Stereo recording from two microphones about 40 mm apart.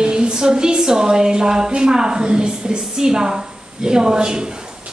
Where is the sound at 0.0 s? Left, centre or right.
Right.